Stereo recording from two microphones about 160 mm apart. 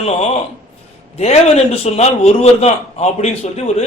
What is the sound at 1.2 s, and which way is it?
A man's voice, 40° left (ahead or behind).